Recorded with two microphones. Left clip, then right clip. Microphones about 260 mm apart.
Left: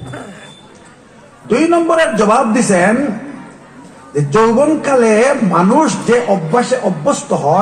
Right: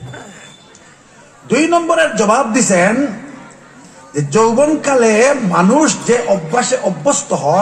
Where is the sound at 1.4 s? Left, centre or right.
Right.